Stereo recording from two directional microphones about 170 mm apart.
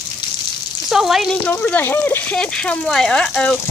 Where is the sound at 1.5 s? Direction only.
10° left (ahead or behind).